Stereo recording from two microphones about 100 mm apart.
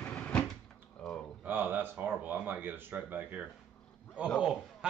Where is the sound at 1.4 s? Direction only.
20° right (ahead or behind).